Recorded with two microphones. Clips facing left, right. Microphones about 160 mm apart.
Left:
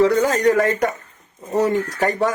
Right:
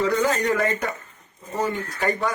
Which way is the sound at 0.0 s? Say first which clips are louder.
Left 6 dB; 35° left (ahead or behind).